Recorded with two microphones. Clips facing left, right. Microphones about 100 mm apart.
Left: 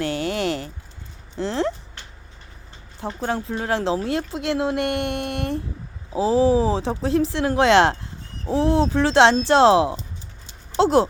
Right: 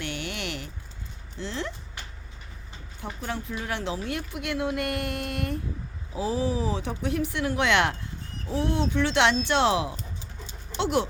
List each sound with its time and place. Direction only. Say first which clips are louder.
0.0 s a sound: left 10 dB; 35° left (ahead or behind)
1.4 s speech: left 10 dB; 35° left (ahead or behind)
3.0 s a woman's voice: left 8 dB; 30° left (ahead or behind)